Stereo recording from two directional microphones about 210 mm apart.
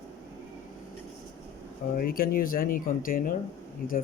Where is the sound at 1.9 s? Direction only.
45° left (ahead or behind).